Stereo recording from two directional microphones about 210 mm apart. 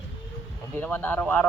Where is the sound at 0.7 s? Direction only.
10° left (ahead or behind).